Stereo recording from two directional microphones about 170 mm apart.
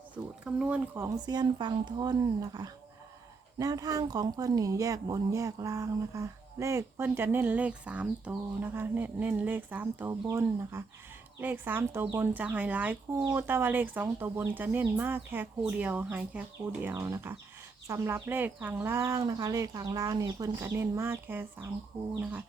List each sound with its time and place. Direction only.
0.4 s speech: 5° right (ahead or behind)